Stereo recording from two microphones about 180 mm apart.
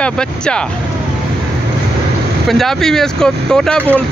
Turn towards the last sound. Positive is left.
turn(degrees=5)  # may be behind; listen again after turning